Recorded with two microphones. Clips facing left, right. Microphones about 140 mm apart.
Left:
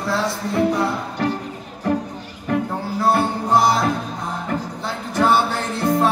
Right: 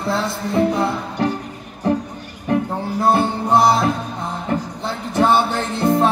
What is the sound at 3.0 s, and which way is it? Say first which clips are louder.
Music: right 2 dB; 25° right (ahead or behind).